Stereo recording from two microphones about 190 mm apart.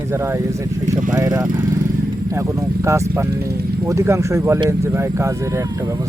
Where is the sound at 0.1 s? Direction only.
15° right (ahead or behind).